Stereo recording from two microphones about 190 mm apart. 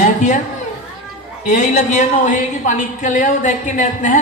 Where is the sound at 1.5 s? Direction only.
40° left (ahead or behind).